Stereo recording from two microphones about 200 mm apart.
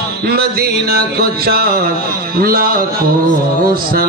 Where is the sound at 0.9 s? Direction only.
50° right (ahead or behind).